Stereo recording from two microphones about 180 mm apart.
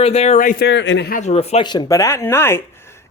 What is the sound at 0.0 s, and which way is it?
Speech, 35° left (ahead or behind).